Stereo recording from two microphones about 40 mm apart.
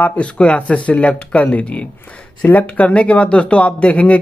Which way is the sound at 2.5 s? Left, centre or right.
Left.